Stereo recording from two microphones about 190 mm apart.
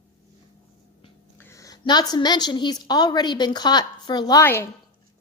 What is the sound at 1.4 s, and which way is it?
A woman's voice, 15° left (ahead or behind).